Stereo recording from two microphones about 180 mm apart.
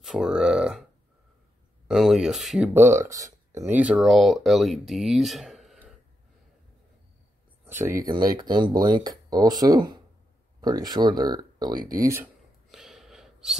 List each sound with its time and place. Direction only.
0.0 s burping: 5° right (ahead or behind)
1.9 s speech: centre (ahead or behind)
7.6 s speech: 15° right (ahead or behind)
12.6 s a sound: centre (ahead or behind)